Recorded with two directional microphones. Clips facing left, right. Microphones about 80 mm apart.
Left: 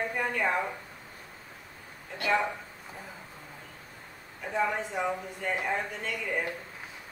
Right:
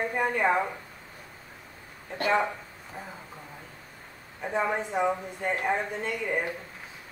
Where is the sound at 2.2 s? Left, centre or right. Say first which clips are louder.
Right 2 dB; right.